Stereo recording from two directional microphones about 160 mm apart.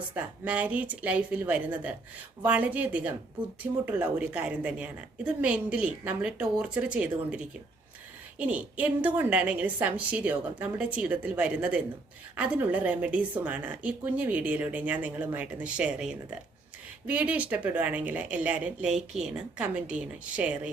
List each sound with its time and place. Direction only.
0.1 s a woman's voice: 10° right (ahead or behind)